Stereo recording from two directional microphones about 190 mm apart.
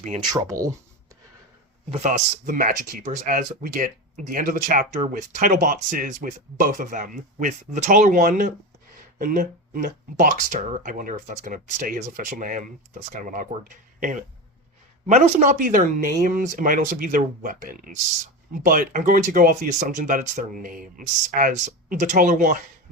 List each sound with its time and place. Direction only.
0.3 s speech: 15° right (ahead or behind)
1.9 s speech: 40° right (ahead or behind)